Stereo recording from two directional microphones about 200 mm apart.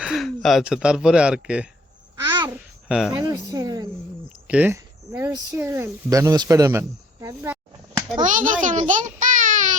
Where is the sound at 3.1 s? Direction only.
20° right (ahead or behind).